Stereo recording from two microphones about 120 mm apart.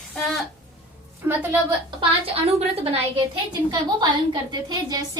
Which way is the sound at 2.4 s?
55° right (ahead or behind).